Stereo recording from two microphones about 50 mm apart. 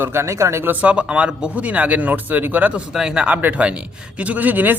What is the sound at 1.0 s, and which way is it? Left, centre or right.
Speech, centre.